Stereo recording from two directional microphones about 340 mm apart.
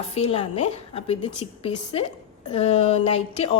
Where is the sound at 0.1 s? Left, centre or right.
Centre.